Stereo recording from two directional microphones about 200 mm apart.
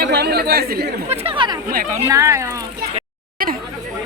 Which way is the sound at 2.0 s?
15° right (ahead or behind).